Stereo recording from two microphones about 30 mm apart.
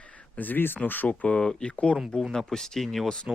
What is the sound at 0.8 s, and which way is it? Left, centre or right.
Speech, left.